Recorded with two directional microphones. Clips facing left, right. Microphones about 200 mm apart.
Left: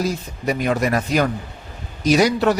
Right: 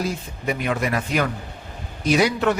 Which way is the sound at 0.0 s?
40° left (ahead or behind).